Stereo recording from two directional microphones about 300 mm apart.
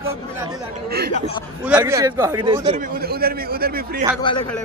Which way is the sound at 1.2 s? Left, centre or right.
Centre.